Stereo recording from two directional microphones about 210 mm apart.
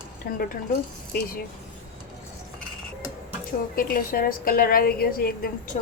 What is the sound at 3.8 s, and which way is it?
A woman's voice, 45° left (ahead or behind).